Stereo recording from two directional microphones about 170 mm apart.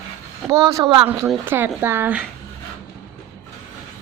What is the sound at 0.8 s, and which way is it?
Speech, 30° right (ahead or behind).